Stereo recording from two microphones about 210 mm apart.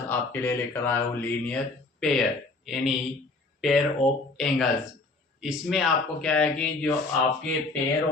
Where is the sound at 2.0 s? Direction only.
Centre (ahead or behind).